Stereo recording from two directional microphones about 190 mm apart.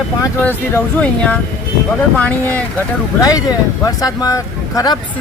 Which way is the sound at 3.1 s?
20° left (ahead or behind).